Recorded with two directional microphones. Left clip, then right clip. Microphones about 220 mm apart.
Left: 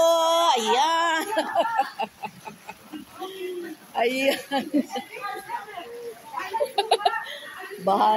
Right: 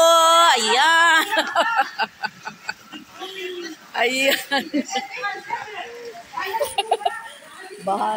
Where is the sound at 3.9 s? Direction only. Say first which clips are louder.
Right 4 dB; 5° left (ahead or behind).